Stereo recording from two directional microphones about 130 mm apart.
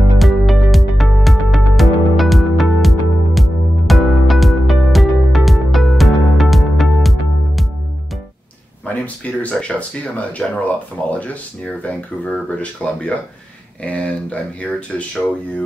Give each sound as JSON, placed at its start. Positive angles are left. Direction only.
{"t": 0.2, "sound": "music", "side_deg": 0}
{"t": 8.8, "sound": "speech", "side_deg": 10}